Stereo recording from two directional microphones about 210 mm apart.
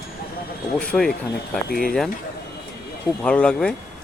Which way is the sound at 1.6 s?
45° left (ahead or behind).